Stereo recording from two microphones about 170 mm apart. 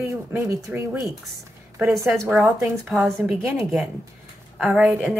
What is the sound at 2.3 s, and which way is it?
A woman's voice, centre (ahead or behind).